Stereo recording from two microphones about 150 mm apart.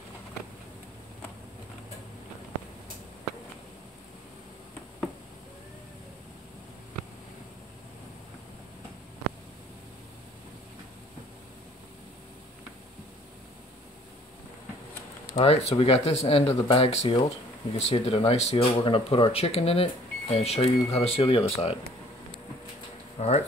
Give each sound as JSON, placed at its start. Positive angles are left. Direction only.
{"t": 15.3, "sound": "speech", "side_deg": 40}
{"t": 23.1, "sound": "speech", "side_deg": 45}